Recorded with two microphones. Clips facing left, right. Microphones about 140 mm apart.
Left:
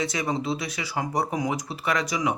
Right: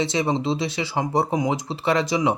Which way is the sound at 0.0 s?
25° right (ahead or behind).